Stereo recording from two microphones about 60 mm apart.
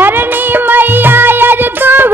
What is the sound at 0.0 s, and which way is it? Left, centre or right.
Music, right.